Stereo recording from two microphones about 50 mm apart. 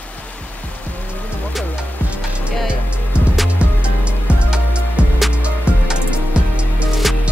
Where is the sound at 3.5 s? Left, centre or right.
Right.